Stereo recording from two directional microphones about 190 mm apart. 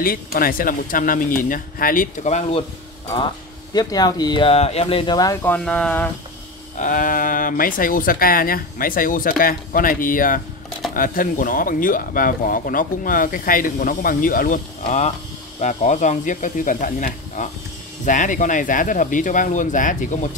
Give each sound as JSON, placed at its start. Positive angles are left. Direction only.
{"t": 0.0, "sound": "speech", "side_deg": 50}
{"t": 3.7, "sound": "speech", "side_deg": 20}
{"t": 6.8, "sound": "speech", "side_deg": 45}